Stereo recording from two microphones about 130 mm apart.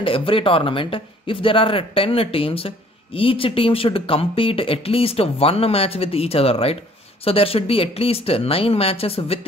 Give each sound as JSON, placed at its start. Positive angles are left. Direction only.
{"t": 0.0, "sound": "speech", "side_deg": 45}